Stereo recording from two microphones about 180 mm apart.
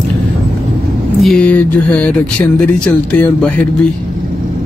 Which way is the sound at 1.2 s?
5° left (ahead or behind).